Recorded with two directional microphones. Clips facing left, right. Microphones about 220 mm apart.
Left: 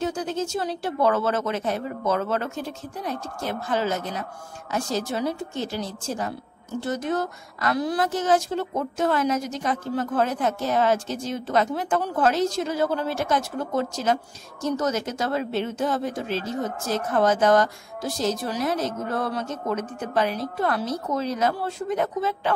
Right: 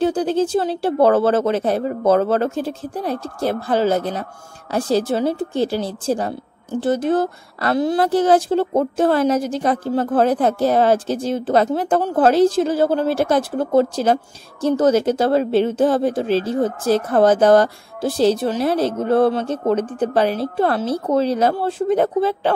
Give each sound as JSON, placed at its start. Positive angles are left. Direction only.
{"t": 0.0, "sound": "a woman's voice", "side_deg": -30}